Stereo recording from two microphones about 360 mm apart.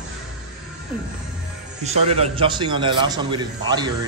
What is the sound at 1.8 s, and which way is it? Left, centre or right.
A man's voice, centre.